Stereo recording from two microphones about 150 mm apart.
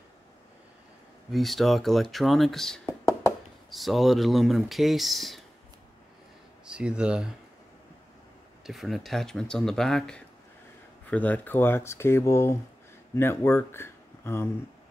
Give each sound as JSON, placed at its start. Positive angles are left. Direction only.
{"t": 1.3, "sound": "speech", "side_deg": 0}
{"t": 2.9, "sound": "a sound", "side_deg": 20}
{"t": 3.7, "sound": "speech", "side_deg": 0}
{"t": 6.6, "sound": "speech", "side_deg": -5}
{"t": 8.6, "sound": "speech", "side_deg": 0}